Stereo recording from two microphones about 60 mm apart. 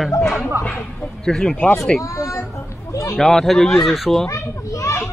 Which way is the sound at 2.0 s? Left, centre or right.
Left.